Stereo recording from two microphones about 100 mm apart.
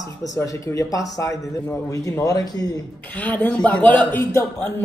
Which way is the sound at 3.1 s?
15° left (ahead or behind).